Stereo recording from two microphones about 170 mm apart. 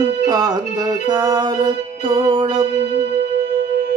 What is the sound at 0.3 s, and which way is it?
Music, 25° right (ahead or behind).